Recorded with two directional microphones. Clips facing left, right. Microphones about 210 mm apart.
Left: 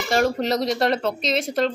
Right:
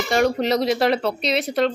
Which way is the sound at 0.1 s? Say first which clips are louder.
Right 1 dB; centre (ahead or behind).